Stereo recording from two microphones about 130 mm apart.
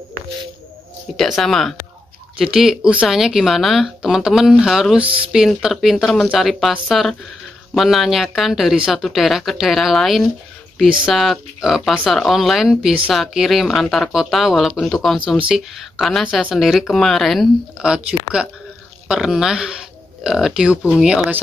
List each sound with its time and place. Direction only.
1.1 s speech: centre (ahead or behind)
5.0 s speech: 45° right (ahead or behind)
5.3 s speech: 5° right (ahead or behind)